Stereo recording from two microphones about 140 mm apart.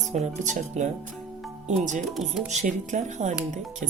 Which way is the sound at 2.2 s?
Centre (ahead or behind).